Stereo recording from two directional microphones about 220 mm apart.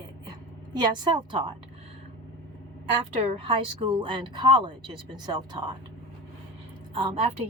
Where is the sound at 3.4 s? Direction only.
25° right (ahead or behind).